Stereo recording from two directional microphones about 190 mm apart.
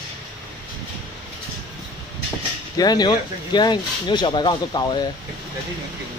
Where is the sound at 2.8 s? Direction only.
20° left (ahead or behind).